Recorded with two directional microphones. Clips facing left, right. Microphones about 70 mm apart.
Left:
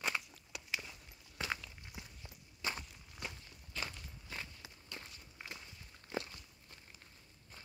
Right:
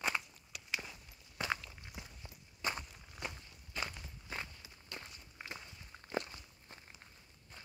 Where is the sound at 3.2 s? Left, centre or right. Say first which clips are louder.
Right 2 dB; centre.